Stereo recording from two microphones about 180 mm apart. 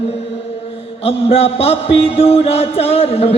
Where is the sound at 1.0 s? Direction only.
35° left (ahead or behind).